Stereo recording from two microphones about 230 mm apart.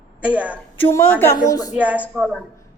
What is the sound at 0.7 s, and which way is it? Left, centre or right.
A woman's voice, centre.